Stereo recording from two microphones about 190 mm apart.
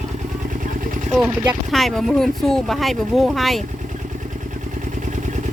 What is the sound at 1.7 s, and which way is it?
Speech, 5° left (ahead or behind).